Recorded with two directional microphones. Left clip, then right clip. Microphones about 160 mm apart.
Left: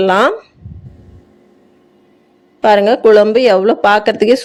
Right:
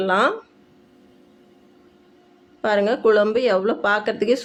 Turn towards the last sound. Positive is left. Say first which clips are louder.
# left 10 dB
turn(degrees=45)  # may be behind; listen again after turning